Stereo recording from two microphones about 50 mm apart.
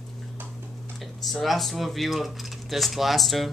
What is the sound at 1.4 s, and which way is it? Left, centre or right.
Speech, centre.